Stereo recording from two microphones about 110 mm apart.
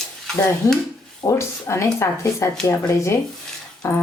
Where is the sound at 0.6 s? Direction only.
30° left (ahead or behind).